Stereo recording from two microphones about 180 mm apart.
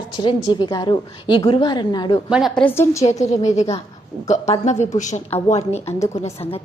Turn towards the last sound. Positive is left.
turn(degrees=35)  # may be behind; listen again after turning